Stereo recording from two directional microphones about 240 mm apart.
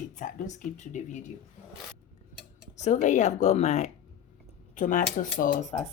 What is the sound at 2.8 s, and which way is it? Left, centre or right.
Speech, left.